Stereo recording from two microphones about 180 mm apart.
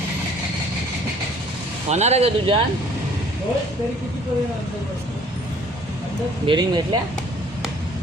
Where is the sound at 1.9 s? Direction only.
35° right (ahead or behind).